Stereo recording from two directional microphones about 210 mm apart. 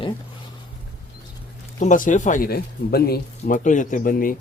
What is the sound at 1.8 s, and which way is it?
Speech, 40° left (ahead or behind).